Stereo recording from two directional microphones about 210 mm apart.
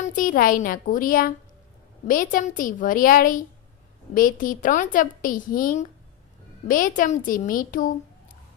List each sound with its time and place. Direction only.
0.0 s a woman's voice: 40° left (ahead or behind)